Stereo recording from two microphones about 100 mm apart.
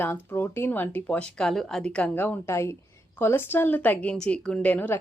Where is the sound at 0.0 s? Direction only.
20° left (ahead or behind).